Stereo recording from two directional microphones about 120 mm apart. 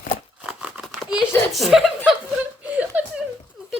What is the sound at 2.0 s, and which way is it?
Chuckle, 10° right (ahead or behind).